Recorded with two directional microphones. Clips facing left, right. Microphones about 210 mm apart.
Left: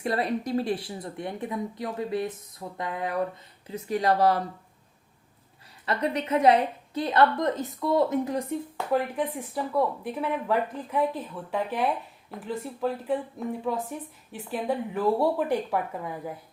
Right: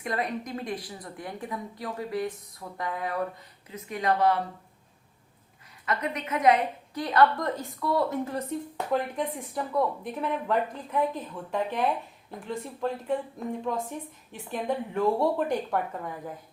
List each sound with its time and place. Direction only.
0.0 s a woman's voice: 30° left (ahead or behind)
3.7 s speech: 35° left (ahead or behind)
5.8 s a woman's voice: 30° left (ahead or behind); by 16.3 s 10° left (ahead or behind)